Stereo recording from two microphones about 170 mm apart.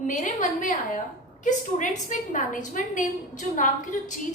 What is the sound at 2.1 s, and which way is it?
A woman's voice, 50° left (ahead or behind).